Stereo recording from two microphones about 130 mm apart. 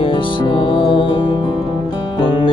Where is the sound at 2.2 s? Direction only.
35° left (ahead or behind).